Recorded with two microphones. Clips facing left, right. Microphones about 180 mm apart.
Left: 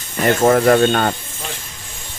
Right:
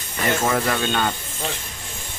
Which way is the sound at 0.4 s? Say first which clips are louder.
Left 13 dB; 50° left (ahead or behind).